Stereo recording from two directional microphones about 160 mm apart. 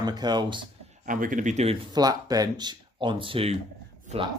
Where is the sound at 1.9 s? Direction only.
25° right (ahead or behind).